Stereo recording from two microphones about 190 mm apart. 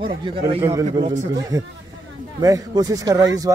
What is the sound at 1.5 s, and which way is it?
A man's voice, 15° right (ahead or behind).